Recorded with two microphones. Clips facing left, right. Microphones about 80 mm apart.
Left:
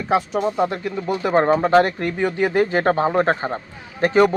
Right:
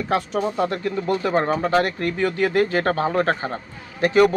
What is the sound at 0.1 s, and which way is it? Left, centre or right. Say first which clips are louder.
Speech: left 4 dB; centre.